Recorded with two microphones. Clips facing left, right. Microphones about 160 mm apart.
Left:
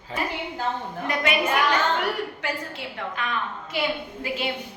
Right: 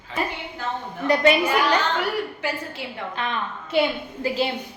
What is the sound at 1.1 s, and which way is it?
Speech, 35° right (ahead or behind).